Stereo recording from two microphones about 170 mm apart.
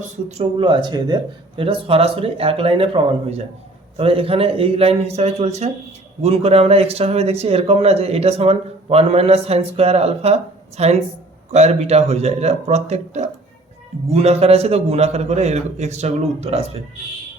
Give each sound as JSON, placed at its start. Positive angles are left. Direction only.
{"t": 0.3, "sound": "speech", "side_deg": -35}